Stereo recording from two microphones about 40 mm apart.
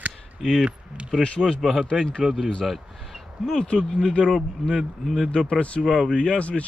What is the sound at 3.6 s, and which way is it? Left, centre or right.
Speech, left.